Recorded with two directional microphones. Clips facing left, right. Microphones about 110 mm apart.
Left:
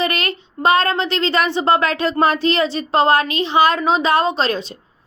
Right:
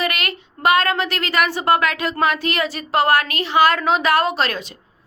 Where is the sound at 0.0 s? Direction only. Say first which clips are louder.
Left 3 dB; 30° left (ahead or behind).